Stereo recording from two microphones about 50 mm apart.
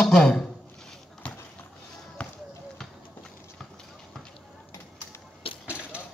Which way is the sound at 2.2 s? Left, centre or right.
Left.